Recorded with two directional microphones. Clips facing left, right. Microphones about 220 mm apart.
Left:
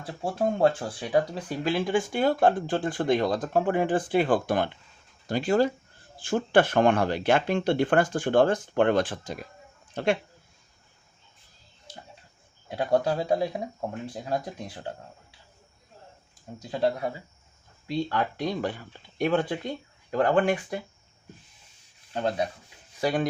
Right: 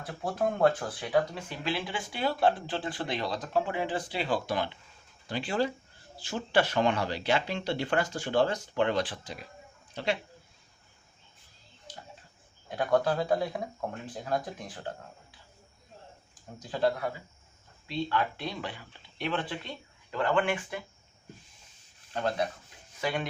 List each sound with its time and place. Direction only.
0.2 s speech: 30° left (ahead or behind); by 10.2 s 50° left (ahead or behind)
12.7 s speech: 25° left (ahead or behind)
16.7 s speech: 25° left (ahead or behind)
18.1 s speech: 40° left (ahead or behind)
22.1 s speech: 30° left (ahead or behind)